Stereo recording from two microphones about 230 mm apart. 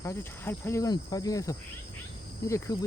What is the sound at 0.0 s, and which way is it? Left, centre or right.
Speech, centre.